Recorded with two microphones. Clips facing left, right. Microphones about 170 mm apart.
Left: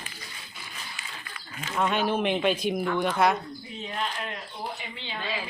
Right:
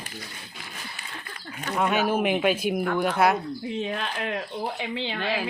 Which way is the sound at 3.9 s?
75° right (ahead or behind).